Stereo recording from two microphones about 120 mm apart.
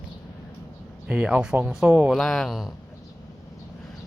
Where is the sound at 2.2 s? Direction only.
5° left (ahead or behind).